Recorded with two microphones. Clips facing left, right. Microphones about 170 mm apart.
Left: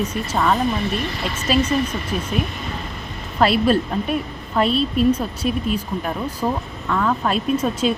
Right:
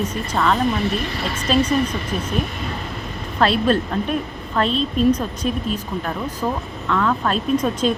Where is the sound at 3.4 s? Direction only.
10° left (ahead or behind).